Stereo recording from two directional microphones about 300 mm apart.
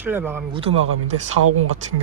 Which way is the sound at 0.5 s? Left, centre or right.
Centre.